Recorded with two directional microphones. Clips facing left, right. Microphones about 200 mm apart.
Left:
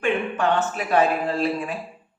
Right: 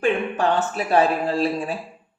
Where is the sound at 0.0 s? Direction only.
35° right (ahead or behind).